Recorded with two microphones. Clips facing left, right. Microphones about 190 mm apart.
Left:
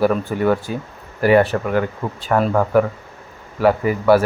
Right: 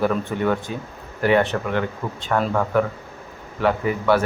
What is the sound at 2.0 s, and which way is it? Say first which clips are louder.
Speech: left 3 dB; 35° left (ahead or behind).